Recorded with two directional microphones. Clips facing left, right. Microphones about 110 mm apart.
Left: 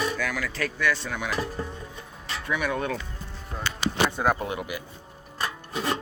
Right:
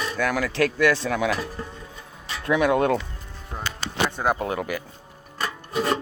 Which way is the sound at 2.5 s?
85° right.